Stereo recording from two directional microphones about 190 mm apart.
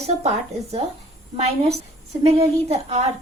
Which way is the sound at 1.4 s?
35° right (ahead or behind).